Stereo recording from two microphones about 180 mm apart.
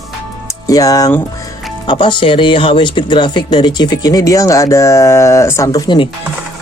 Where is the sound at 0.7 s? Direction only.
20° left (ahead or behind).